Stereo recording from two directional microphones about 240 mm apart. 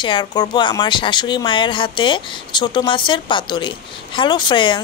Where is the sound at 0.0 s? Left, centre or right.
Centre.